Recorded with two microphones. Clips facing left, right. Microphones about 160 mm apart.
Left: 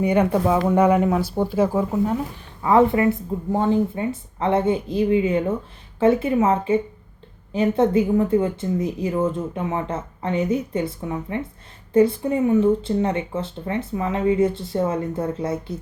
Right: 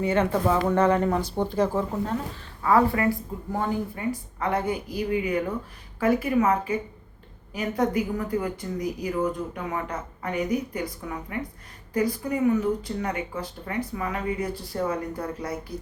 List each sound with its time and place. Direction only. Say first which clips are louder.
0.0 s speech: left 4 dB; 15° left (ahead or behind)
2.6 s speech: left 5 dB; 20° left (ahead or behind)